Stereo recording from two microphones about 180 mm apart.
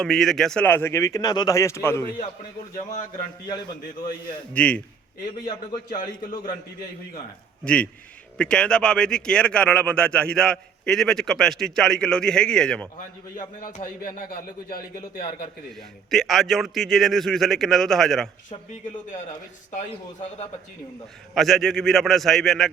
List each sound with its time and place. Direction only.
0.0 s speech: centre (ahead or behind)
4.5 s speech: 5° left (ahead or behind)
5.5 s a man's voice: 20° left (ahead or behind)
7.6 s a man's voice: 5° left (ahead or behind)
13.6 s speech: 50° left (ahead or behind)
15.7 s a man's voice: centre (ahead or behind)
19.1 s a man's voice: 40° left (ahead or behind)
21.3 s a man's voice: centre (ahead or behind)